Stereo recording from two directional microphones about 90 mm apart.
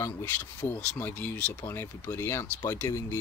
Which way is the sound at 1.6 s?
30° left (ahead or behind).